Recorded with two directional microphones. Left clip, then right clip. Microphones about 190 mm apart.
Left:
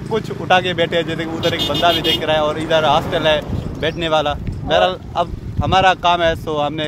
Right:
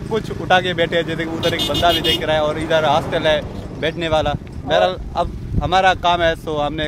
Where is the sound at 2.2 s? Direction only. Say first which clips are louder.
Left 1 dB; 5° left (ahead or behind).